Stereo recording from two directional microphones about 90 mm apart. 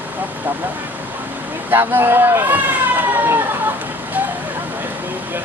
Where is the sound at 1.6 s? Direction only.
25° right (ahead or behind).